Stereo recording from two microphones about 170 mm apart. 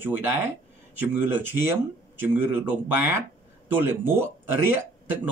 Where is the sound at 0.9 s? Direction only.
10° right (ahead or behind).